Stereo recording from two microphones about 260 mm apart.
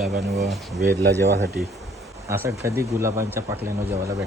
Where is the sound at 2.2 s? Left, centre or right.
Centre.